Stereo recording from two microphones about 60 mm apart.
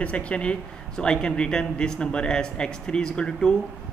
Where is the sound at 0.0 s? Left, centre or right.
Centre.